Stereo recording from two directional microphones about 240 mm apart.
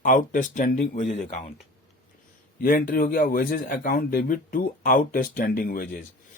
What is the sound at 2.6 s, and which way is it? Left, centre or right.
A man's voice, left.